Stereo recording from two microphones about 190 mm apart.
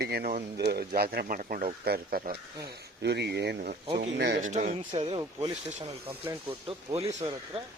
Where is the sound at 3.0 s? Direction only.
65° right (ahead or behind).